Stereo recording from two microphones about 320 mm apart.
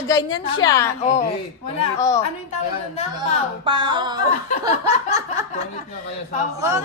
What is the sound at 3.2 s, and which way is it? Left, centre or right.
Speech, centre.